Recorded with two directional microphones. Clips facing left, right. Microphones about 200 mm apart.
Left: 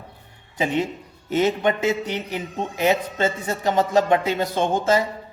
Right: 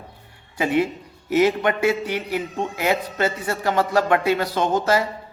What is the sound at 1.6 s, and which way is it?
A man's voice, 20° left (ahead or behind).